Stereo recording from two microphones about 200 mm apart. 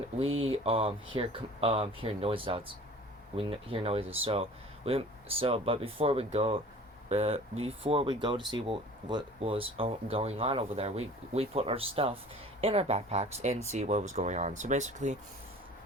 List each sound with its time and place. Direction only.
0.3 s speech: 85° right
0.5 s speech: 30° right (ahead or behind)